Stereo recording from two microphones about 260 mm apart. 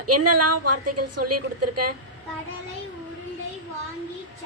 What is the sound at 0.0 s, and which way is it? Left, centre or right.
A woman's voice, right.